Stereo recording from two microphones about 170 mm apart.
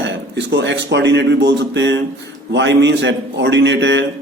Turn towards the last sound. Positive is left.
turn(degrees=-90)